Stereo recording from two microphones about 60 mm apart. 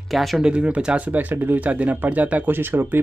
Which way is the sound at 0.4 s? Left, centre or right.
Centre.